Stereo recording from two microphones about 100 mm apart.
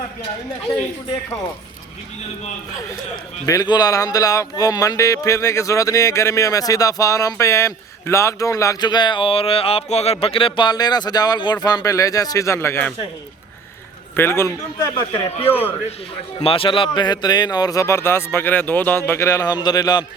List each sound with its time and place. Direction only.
3.4 s speech: 40° left (ahead or behind)
8.8 s speech: 45° left (ahead or behind); by 12.8 s 25° left (ahead or behind)
14.2 s speech: 25° left (ahead or behind)
15.4 s speech: 20° left (ahead or behind)
16.4 s speech: 65° left (ahead or behind); by 17.8 s 40° left (ahead or behind)
17.8 s speech: 25° left (ahead or behind); by 20.1 s 40° left (ahead or behind)